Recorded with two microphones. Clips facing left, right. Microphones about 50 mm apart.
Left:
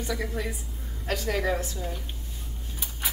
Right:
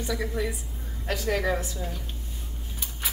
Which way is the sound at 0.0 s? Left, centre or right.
Centre.